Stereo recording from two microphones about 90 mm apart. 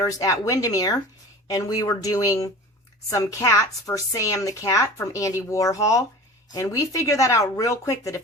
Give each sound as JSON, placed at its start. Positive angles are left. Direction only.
{"t": 0.0, "sound": "a woman's voice", "side_deg": 35}